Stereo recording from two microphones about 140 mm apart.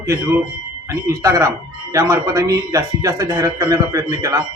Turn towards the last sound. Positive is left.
turn(degrees=-25)  # may be behind; listen again after turning